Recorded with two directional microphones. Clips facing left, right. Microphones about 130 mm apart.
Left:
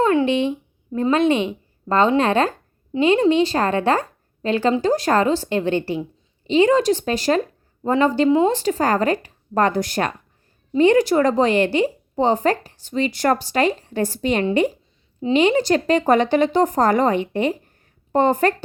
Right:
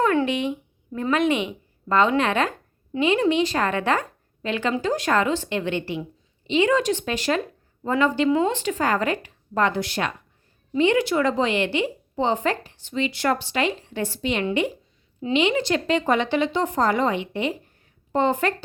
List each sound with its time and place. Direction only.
0.0 s a child's voice: 25° left (ahead or behind); by 18.5 s 45° left (ahead or behind)